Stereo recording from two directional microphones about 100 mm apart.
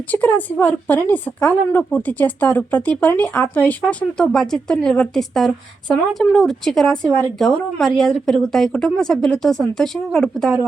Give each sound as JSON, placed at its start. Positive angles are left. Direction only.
{"t": 0.1, "sound": "a woman's voice", "side_deg": 20}
{"t": 4.3, "sound": "speech", "side_deg": 5}